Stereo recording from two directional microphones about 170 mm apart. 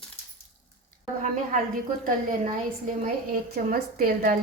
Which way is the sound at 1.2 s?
50° right (ahead or behind).